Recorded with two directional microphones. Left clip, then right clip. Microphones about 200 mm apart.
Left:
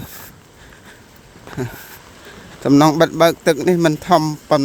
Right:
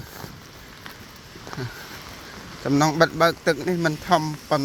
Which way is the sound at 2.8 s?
45° left (ahead or behind).